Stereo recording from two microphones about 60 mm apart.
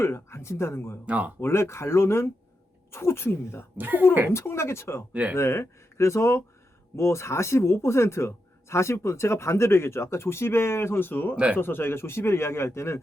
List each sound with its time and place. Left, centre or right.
0.0 s speech: left
1.0 s speech: right
1.4 s speech: left
3.8 s speech: right
4.3 s speech: left
11.3 s speech: centre
11.6 s speech: left